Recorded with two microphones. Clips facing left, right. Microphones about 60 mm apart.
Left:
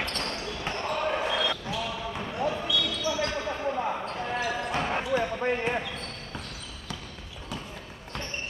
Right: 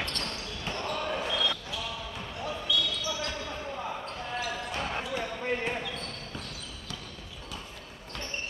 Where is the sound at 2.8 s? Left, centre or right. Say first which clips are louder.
Left 4 dB; left.